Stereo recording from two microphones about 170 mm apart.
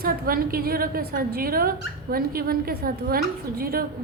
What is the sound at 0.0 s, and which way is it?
A woman's voice, 60° right (ahead or behind).